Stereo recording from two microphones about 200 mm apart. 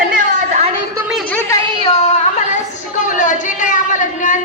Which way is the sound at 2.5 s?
40° left (ahead or behind).